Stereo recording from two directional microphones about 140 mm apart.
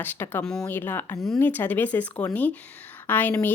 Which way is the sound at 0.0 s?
15° left (ahead or behind).